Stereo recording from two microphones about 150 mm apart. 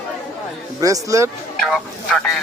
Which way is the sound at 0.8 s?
20° right (ahead or behind).